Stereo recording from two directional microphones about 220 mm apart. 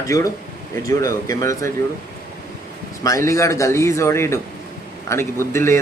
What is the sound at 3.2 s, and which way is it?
A man's voice, 15° left (ahead or behind).